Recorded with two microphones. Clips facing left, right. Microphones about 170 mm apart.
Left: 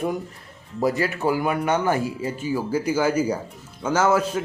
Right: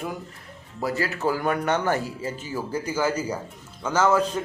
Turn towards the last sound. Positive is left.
turn(degrees=5)  # may be behind; listen again after turning